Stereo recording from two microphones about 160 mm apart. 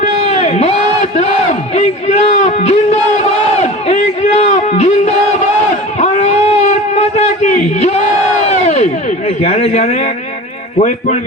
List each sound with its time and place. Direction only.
0.3 s crowd: 45° left (ahead or behind)
1.1 s a sound: 45° left (ahead or behind)
10.8 s a man's voice: 45° left (ahead or behind)